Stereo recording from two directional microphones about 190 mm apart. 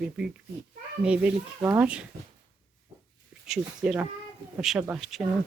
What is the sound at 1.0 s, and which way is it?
Speech, 5° right (ahead or behind).